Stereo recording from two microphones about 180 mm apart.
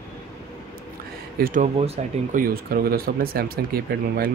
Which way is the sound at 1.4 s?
60° right (ahead or behind).